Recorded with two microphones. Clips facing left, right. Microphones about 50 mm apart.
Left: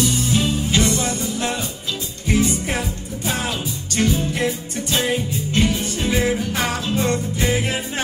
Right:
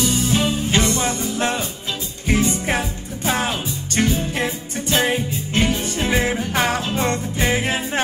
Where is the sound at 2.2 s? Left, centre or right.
Right.